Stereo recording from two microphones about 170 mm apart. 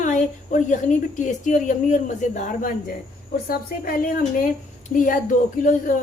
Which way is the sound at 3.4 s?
65° left (ahead or behind).